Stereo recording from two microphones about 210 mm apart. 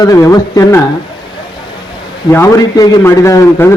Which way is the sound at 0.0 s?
15° left (ahead or behind).